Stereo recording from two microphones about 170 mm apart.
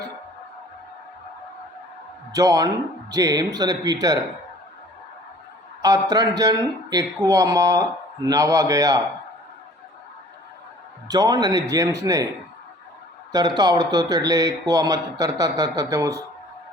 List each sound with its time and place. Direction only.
2.3 s speech: 20° right (ahead or behind)
5.8 s speech: 20° right (ahead or behind)
11.1 s speech: 20° right (ahead or behind)
13.3 s speech: 25° right (ahead or behind)